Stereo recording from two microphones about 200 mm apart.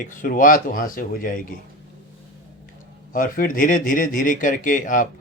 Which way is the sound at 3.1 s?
45° left (ahead or behind).